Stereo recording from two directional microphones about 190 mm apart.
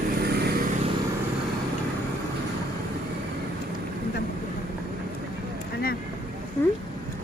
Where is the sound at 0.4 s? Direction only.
50° right (ahead or behind).